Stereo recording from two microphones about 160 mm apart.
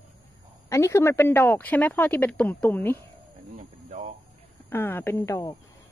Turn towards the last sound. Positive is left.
turn(degrees=15)  # may be behind; listen again after turning